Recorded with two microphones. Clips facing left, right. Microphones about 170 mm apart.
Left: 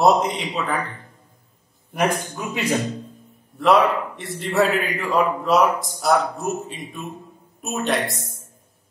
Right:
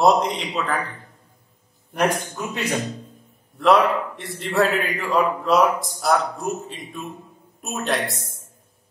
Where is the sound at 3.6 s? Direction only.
Centre (ahead or behind).